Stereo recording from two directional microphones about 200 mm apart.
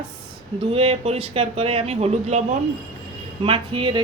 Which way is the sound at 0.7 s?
30° right (ahead or behind).